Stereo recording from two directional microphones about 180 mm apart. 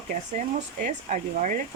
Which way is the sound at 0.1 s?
45° right (ahead or behind).